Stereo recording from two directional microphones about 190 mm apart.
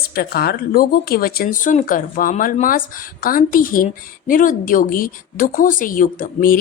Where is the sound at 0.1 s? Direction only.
55° left (ahead or behind).